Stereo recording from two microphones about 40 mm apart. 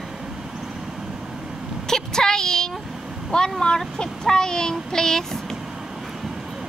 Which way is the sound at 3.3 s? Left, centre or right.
Centre.